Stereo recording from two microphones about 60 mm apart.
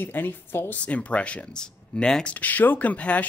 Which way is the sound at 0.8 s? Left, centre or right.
Left.